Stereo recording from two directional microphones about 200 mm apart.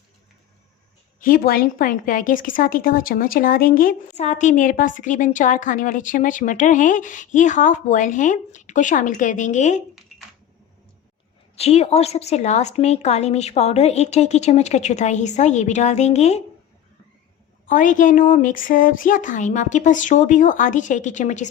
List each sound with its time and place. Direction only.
1.2 s a woman's voice: 45° left (ahead or behind)
11.5 s a woman's voice: 30° left (ahead or behind)
17.7 s a woman's voice: 40° left (ahead or behind)